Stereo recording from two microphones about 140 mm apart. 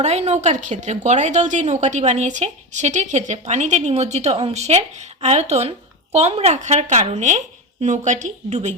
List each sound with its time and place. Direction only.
0.0 s a woman's voice: 50° right (ahead or behind)